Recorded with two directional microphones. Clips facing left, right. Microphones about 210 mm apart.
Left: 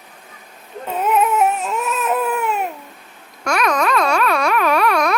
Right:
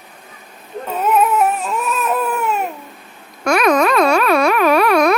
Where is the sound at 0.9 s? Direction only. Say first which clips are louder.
Right 1 dB; 15° left (ahead or behind).